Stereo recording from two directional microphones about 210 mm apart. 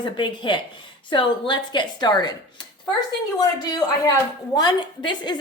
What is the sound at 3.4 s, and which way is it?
Speech, 15° left (ahead or behind).